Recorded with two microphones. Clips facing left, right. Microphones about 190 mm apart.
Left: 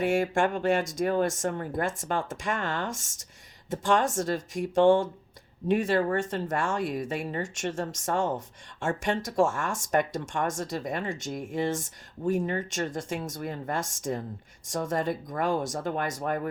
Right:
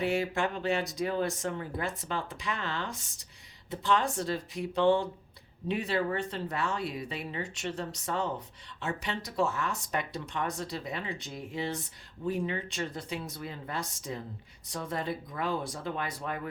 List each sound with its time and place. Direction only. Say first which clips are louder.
0.0 s speech: left 5 dB; 50° left (ahead or behind)